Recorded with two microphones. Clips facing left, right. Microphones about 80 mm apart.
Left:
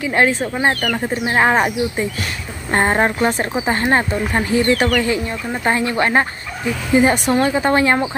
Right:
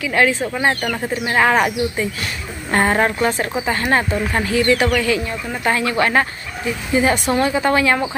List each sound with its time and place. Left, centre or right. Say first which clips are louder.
0.0 s speech: left 1 dB; left
0.3 s speech: left 1 dB; centre
7.0 s speech: left 2 dB; left